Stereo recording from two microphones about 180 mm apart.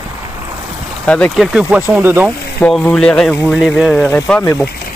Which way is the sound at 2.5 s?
10° left (ahead or behind).